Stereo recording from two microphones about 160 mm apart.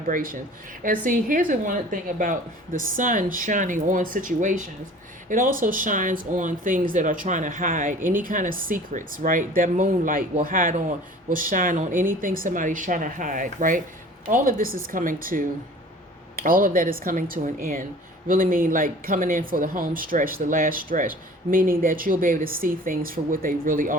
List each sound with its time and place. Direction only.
0.1 s speech: 60° right (ahead or behind)